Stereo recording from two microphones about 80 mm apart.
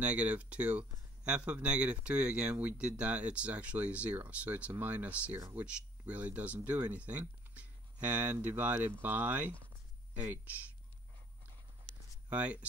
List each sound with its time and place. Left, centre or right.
0.0 s speech: centre
12.3 s speech: centre